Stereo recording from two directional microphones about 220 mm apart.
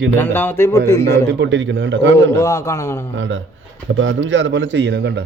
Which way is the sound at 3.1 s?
60° right (ahead or behind).